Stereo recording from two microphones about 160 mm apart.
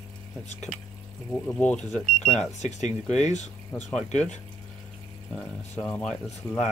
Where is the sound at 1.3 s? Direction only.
10° left (ahead or behind).